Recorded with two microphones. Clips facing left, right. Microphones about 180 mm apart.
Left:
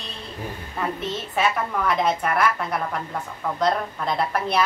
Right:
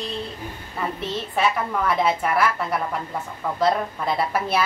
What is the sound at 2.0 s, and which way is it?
A woman's voice, 5° right (ahead or behind).